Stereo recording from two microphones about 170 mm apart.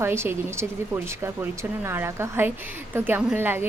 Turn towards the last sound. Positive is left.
turn(degrees=-15)  # may be behind; listen again after turning